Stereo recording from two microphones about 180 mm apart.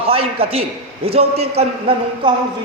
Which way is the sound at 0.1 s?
30° right (ahead or behind).